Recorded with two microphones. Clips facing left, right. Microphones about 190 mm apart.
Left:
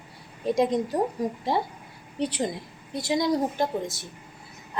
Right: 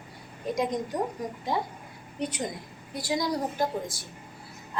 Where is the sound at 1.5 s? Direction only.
30° left (ahead or behind).